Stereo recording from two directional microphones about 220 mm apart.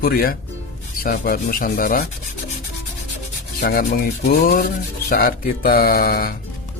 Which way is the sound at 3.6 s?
45° left (ahead or behind).